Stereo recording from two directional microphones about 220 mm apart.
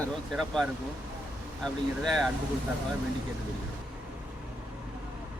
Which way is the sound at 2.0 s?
Centre (ahead or behind).